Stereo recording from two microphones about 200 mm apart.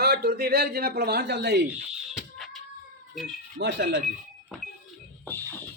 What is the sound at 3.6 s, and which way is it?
Speech, 60° right (ahead or behind).